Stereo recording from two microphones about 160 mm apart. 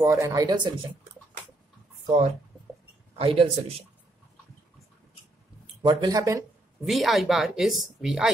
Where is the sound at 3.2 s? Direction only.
35° right (ahead or behind).